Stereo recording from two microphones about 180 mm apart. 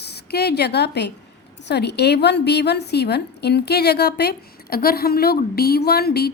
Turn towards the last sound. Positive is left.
turn(degrees=60)  # may be behind; listen again after turning